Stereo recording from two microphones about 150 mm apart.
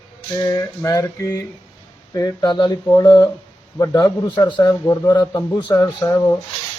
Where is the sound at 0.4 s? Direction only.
20° left (ahead or behind).